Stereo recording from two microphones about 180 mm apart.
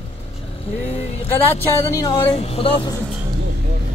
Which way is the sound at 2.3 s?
35° left (ahead or behind).